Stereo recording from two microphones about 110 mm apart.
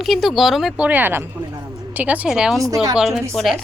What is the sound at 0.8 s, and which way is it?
A woman's voice, 15° right (ahead or behind).